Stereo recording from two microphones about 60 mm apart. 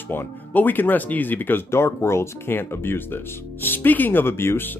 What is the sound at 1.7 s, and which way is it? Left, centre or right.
Speech, left.